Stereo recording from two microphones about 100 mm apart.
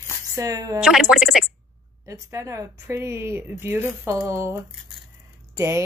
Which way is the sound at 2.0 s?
30° right (ahead or behind).